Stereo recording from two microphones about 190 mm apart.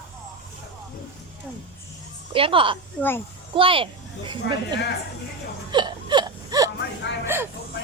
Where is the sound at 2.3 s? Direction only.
30° right (ahead or behind).